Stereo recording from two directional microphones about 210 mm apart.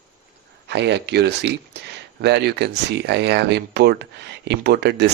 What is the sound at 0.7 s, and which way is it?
Speech, 55° right (ahead or behind).